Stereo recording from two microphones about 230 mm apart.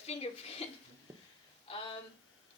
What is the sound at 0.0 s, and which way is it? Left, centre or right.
Speech, left.